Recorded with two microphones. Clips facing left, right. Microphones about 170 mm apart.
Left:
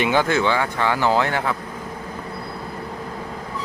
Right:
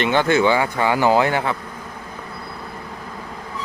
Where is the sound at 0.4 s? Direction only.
10° right (ahead or behind).